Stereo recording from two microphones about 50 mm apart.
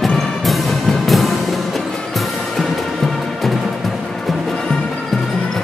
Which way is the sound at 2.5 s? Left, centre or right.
Centre.